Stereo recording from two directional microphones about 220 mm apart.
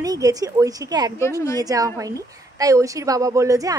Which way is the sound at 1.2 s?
15° left (ahead or behind).